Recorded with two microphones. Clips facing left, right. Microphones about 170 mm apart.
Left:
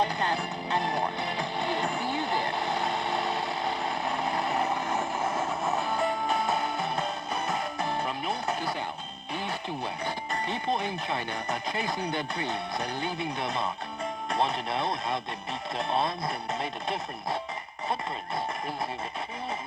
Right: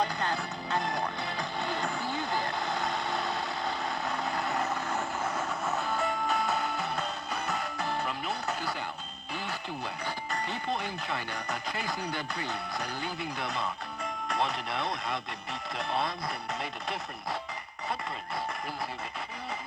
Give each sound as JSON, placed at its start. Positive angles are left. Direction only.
{"t": 0.0, "sound": "music", "side_deg": 20}
{"t": 9.3, "sound": "speech", "side_deg": 20}